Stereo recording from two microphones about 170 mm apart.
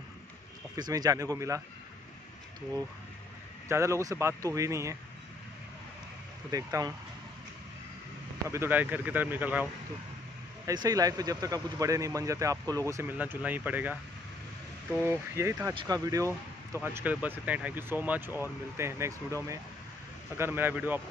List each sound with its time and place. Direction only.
0.7 s speech: 25° right (ahead or behind)
3.6 s speech: 15° right (ahead or behind)
6.5 s speech: 20° right (ahead or behind)
8.5 s speech: 15° right (ahead or behind)
10.7 s speech: 20° right (ahead or behind)
15.0 s speech: 15° right (ahead or behind)